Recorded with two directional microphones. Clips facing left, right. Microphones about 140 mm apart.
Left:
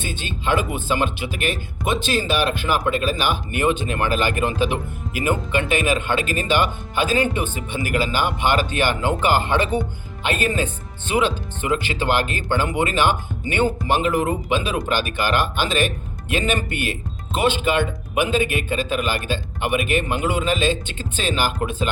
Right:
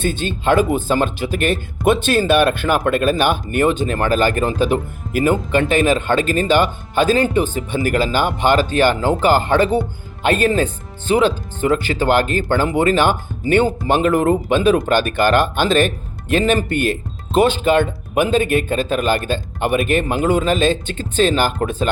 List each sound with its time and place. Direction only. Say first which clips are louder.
0.0 s speech: right 7 dB; 50° right (ahead or behind)